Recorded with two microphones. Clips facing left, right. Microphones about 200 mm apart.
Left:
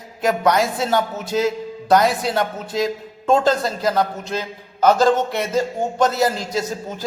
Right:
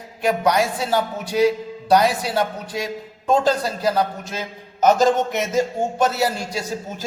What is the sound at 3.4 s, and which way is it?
Speech, 10° right (ahead or behind).